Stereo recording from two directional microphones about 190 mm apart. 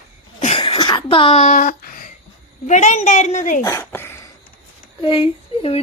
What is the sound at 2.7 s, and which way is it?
Speech, 40° left (ahead or behind).